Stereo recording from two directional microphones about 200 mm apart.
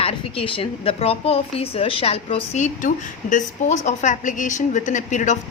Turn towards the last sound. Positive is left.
turn(degrees=35)  # may be behind; listen again after turning